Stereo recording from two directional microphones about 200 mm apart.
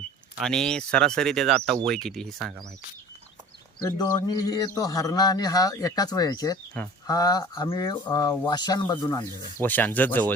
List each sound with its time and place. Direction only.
0.4 s speech: 5° left (ahead or behind)
3.8 s a man's voice: 15° left (ahead or behind)